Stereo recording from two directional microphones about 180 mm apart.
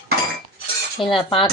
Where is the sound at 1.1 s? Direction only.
30° left (ahead or behind).